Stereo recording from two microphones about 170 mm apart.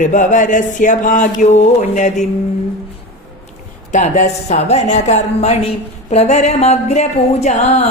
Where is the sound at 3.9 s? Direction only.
45° left (ahead or behind).